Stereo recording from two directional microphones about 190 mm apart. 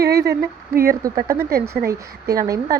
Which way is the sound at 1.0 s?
15° right (ahead or behind).